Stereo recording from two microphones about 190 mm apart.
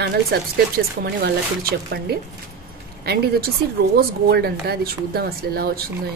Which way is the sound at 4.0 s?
55° right (ahead or behind).